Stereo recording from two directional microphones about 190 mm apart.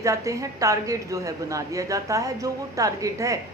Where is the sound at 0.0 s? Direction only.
15° right (ahead or behind).